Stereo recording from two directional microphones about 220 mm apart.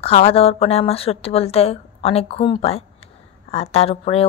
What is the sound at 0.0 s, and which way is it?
Speech, 25° left (ahead or behind).